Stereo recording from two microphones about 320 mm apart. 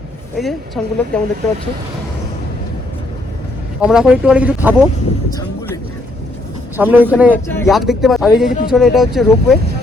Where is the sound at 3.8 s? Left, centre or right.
Centre.